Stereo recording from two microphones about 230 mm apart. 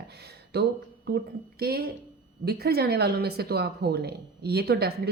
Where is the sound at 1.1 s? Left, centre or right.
Right.